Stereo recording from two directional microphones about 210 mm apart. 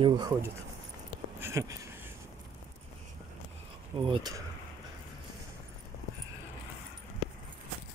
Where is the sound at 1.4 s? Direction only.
15° right (ahead or behind).